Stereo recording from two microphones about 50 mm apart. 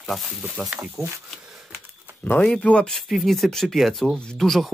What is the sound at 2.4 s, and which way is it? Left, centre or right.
Speech, left.